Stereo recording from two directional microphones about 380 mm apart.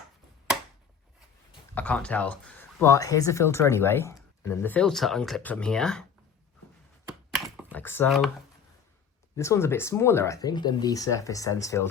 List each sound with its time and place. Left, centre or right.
1.7 s speech: centre
7.3 s computer keyboard: centre
9.3 s speech: centre